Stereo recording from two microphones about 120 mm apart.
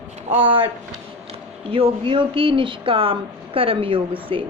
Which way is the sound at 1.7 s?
50° right (ahead or behind).